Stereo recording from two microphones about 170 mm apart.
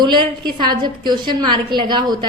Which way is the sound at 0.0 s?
25° right (ahead or behind).